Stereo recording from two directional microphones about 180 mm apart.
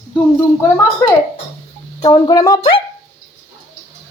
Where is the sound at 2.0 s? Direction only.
20° left (ahead or behind).